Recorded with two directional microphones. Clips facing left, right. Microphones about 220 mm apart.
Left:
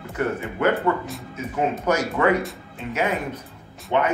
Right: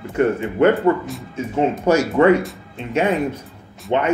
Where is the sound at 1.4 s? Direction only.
30° right (ahead or behind).